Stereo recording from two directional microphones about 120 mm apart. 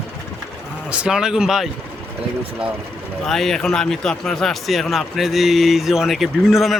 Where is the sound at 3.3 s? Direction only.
Centre (ahead or behind).